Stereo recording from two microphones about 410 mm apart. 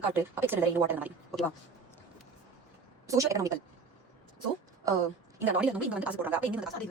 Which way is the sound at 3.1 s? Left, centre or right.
Centre.